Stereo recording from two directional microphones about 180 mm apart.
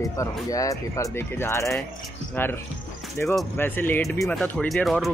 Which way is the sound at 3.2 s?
10° left (ahead or behind).